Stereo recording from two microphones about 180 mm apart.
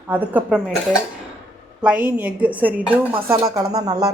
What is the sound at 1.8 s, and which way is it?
Speech, 10° right (ahead or behind).